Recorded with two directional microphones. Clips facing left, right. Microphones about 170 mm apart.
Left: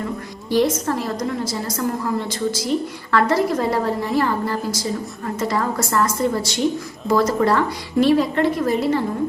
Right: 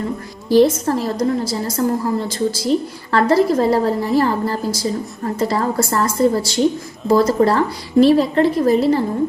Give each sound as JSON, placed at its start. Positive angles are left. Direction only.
{"t": 0.4, "sound": "a woman's voice", "side_deg": -35}